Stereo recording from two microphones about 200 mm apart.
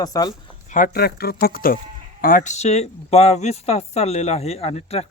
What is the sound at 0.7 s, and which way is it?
Speech, 45° left (ahead or behind).